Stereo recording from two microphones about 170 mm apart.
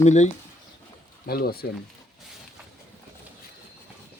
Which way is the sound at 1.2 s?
65° left (ahead or behind).